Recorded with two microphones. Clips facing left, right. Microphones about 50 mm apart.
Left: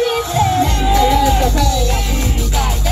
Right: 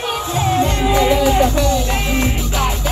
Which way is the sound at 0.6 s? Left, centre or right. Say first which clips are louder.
Left 1 dB; right.